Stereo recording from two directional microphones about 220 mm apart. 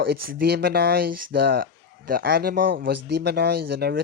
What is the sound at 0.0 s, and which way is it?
Speech, 45° right (ahead or behind).